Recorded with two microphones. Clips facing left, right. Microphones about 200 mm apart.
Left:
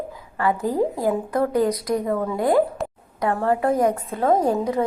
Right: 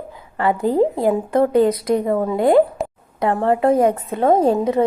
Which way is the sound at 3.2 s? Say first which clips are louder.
Right 4 dB; 20° right (ahead or behind).